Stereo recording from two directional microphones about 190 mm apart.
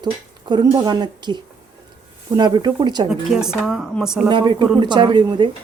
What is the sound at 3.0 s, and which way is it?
A woman's voice, 5° right (ahead or behind).